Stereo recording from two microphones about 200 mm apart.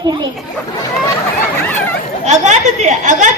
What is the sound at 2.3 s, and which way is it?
A woman's voice, 35° right (ahead or behind).